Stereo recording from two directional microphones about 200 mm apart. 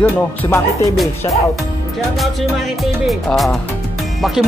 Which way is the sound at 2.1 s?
Centre (ahead or behind).